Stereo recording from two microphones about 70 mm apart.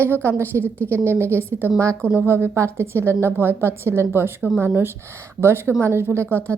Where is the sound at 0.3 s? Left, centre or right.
Right.